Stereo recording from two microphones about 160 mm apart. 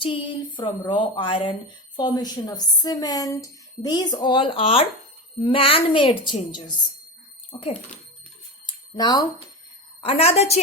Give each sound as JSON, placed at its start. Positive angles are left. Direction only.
{"t": 0.0, "sound": "a woman's voice", "side_deg": 30}
{"t": 8.6, "sound": "bicycle bell", "side_deg": 25}
{"t": 10.0, "sound": "speech", "side_deg": 35}